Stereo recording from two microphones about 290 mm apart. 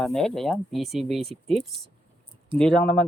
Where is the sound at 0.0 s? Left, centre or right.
Centre.